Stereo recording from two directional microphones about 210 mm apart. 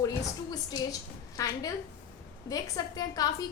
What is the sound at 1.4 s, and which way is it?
A woman's voice, 15° left (ahead or behind).